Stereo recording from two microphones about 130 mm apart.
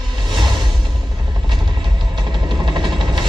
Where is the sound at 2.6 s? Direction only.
35° right (ahead or behind).